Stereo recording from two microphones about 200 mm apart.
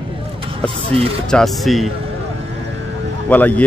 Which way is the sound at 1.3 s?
Centre (ahead or behind).